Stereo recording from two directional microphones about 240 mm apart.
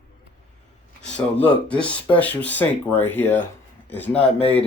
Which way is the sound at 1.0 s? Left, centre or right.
Centre.